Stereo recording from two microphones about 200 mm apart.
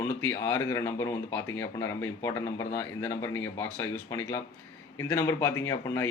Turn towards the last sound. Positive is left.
turn(degrees=15)  # may be behind; listen again after turning